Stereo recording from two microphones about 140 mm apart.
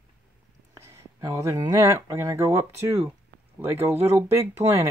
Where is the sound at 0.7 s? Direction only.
20° right (ahead or behind).